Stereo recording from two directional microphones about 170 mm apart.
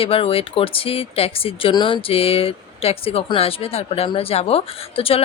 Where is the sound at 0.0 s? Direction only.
35° left (ahead or behind).